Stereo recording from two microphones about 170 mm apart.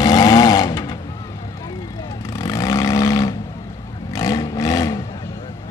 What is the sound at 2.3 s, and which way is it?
Vehicle, 20° left (ahead or behind).